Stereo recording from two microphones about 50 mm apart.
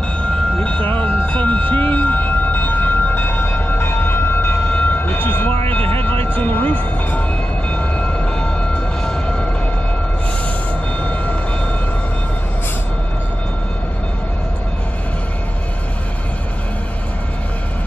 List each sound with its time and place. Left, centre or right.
0.2 s train: centre
0.8 s siren: left
7.7 s train: left
11.0 s train: left